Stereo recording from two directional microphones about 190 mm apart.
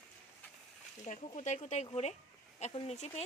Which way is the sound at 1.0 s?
35° left (ahead or behind).